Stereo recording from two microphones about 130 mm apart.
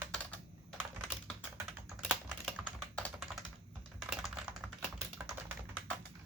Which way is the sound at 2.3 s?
5° left (ahead or behind).